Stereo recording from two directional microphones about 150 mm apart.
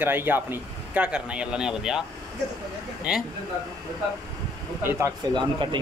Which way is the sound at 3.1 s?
5° right (ahead or behind).